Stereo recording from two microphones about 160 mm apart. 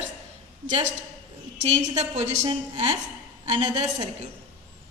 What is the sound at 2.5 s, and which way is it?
A woman's voice, 30° right (ahead or behind).